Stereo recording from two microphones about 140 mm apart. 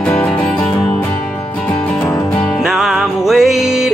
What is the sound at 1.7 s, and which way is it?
Music, 10° left (ahead or behind).